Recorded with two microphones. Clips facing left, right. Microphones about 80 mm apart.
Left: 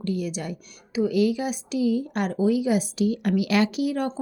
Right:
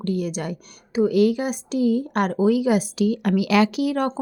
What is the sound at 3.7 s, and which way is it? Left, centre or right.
Speech, right.